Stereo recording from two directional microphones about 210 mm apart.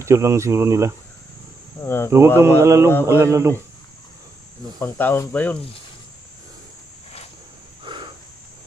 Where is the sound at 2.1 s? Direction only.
15° right (ahead or behind).